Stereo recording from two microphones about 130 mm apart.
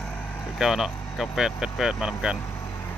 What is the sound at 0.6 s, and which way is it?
Speech, 5° right (ahead or behind).